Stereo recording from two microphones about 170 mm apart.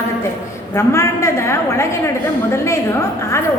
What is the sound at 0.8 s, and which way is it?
A woman's voice, 15° left (ahead or behind).